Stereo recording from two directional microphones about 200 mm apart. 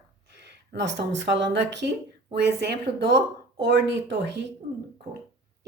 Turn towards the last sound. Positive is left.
turn(degrees=-60)  # may be behind; listen again after turning